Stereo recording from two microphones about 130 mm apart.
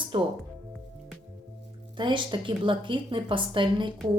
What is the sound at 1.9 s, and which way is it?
A woman's voice, 40° right (ahead or behind).